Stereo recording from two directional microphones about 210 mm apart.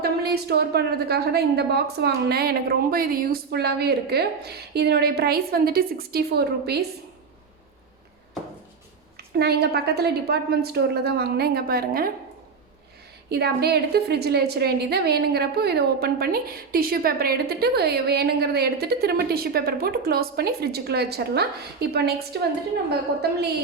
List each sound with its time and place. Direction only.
0.0 s a woman's voice: 50° right (ahead or behind)
9.1 s a woman's voice: 50° right (ahead or behind)
13.3 s a woman's voice: 50° right (ahead or behind)